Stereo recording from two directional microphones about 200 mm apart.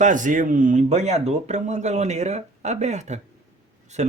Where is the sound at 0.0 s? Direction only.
40° right (ahead or behind).